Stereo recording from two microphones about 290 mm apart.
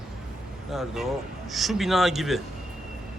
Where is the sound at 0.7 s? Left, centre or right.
Centre.